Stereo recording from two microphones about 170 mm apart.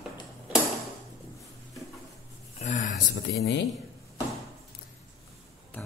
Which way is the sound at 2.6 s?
45° left (ahead or behind).